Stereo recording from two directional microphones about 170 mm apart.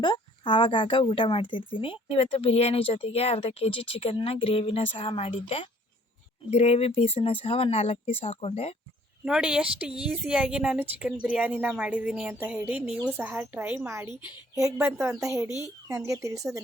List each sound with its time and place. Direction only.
0.0 s speech: 30° left (ahead or behind)
9.2 s a woman's voice: 5° right (ahead or behind)
15.4 s speech: 20° left (ahead or behind)
16.0 s speech: 20° right (ahead or behind)